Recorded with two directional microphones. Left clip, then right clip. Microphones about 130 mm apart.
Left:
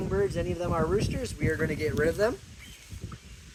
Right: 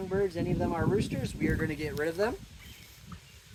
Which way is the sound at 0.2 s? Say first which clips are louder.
Left 1 dB; 15° right (ahead or behind).